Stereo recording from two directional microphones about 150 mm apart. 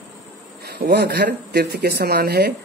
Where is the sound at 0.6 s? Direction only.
90° right.